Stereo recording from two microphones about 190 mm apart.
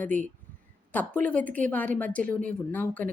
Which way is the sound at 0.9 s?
10° left (ahead or behind).